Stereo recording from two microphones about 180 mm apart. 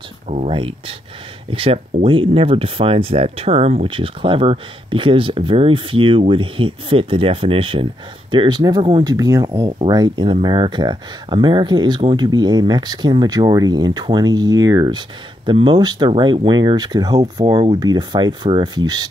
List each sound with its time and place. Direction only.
0.3 s speech: 35° right (ahead or behind)